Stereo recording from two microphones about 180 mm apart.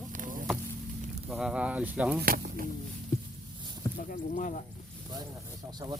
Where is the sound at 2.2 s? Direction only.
55° right (ahead or behind).